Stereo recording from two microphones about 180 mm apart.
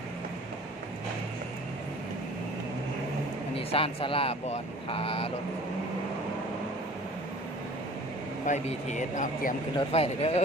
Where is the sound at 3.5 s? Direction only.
30° left (ahead or behind).